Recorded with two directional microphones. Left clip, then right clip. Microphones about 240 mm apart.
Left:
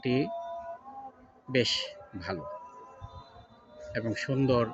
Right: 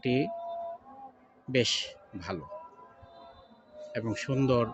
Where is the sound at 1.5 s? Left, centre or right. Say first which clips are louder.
Even; centre.